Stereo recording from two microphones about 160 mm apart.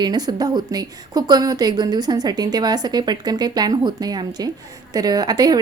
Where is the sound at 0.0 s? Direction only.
25° right (ahead or behind).